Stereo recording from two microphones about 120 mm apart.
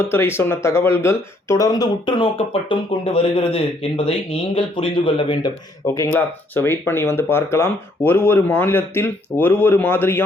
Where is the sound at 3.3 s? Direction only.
55° left (ahead or behind).